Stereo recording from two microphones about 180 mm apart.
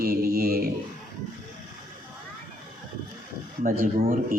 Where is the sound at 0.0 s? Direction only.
55° right (ahead or behind).